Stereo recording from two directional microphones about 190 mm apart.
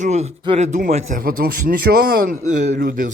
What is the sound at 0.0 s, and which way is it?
Speech, 35° right (ahead or behind).